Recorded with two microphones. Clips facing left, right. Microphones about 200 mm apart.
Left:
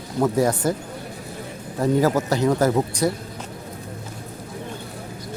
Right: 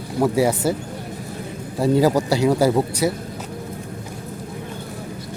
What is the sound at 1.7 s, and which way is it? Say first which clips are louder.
Speech: right 2 dB; 10° right (ahead or behind).